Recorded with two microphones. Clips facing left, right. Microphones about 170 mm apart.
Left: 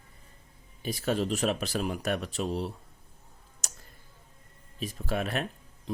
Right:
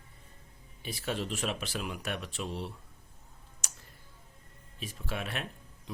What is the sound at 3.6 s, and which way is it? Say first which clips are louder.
Tick: left 3 dB; 40° left (ahead or behind).